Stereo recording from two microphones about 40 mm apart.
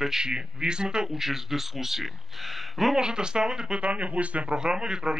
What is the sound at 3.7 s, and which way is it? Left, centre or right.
Speech, right.